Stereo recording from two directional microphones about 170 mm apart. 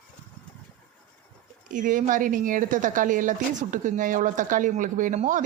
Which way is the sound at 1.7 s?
50° right (ahead or behind).